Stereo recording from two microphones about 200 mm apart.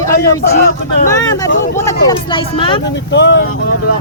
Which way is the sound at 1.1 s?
20° left (ahead or behind).